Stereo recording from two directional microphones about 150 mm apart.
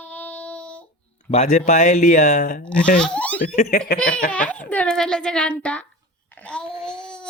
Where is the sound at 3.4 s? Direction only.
75° left (ahead or behind).